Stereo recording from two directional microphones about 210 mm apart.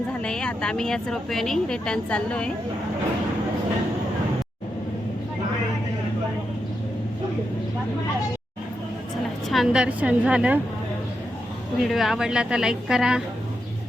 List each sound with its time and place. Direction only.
0.1 s speech: 5° left (ahead or behind)
9.5 s speech: centre (ahead or behind)
11.8 s speech: centre (ahead or behind)